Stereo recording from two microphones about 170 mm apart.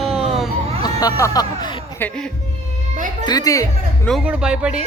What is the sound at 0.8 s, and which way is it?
Music, 20° left (ahead or behind).